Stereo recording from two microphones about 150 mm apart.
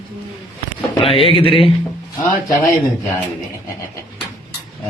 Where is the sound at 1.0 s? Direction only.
40° left (ahead or behind).